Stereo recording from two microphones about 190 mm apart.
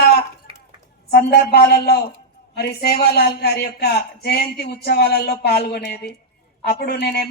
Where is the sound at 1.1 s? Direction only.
55° left (ahead or behind).